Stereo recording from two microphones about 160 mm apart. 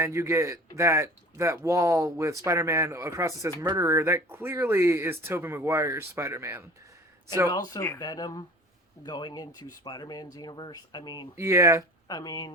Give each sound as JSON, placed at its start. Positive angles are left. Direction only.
{"t": 0.0, "sound": "speech", "side_deg": -15}
{"t": 7.5, "sound": "speech", "side_deg": 20}
{"t": 11.3, "sound": "speech", "side_deg": -15}
{"t": 12.0, "sound": "speech", "side_deg": 25}